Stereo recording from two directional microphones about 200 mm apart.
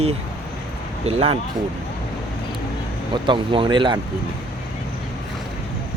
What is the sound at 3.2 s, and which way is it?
Speech, 25° right (ahead or behind).